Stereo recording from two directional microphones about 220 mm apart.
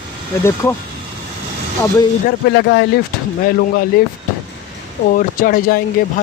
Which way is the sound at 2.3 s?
50° left (ahead or behind).